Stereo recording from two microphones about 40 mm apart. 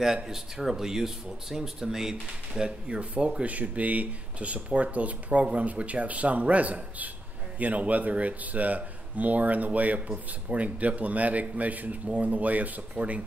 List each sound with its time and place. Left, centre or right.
0.0 s speech: centre
2.9 s speech: right